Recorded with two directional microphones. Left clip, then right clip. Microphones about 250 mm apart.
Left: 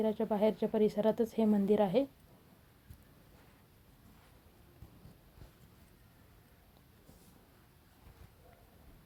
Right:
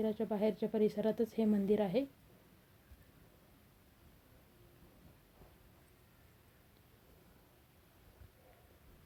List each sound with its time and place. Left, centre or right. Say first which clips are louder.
0.0 s a woman's voice: left 4 dB; centre